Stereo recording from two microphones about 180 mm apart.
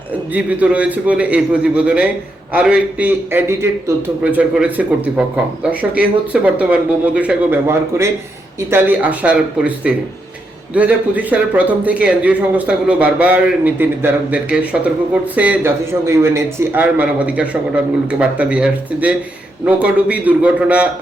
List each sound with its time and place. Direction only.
0.3 s speech: 5° right (ahead or behind)